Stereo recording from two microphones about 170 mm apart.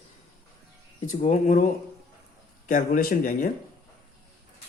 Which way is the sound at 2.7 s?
55° left (ahead or behind).